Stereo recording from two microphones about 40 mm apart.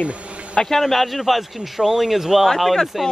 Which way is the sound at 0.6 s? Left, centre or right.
Centre.